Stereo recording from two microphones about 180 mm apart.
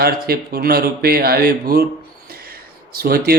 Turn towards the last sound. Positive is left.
turn(degrees=-60)  # may be behind; listen again after turning